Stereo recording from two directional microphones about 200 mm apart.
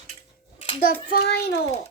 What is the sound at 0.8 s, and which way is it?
Child singing, 50° left (ahead or behind).